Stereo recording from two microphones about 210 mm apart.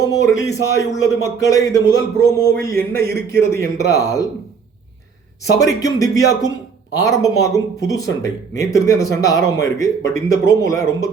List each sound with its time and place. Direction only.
0.2 s speech: 15° left (ahead or behind)
2.1 s a sound: 45° right (ahead or behind)
3.5 s speech: 15° left (ahead or behind)
5.4 s speech: 15° left (ahead or behind)